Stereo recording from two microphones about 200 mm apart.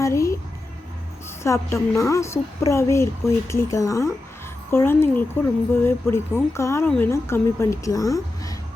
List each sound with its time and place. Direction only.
0.0 s speech: 15° left (ahead or behind)
1.5 s speech: 15° left (ahead or behind)